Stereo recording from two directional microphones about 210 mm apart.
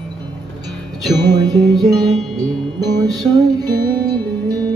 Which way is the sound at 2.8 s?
20° right (ahead or behind).